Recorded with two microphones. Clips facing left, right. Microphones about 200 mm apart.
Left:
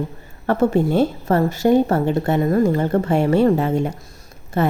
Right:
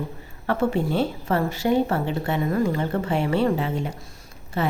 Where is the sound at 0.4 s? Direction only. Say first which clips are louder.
Left 6 dB; 45° left (ahead or behind).